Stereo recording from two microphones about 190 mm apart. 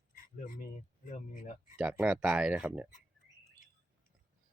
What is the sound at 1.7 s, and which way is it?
Speech, 10° right (ahead or behind).